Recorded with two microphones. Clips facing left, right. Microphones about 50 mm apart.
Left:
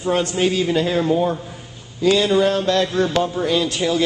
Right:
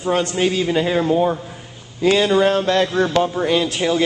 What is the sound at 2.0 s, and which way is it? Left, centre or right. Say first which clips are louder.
A man's voice: right 1 dB; right.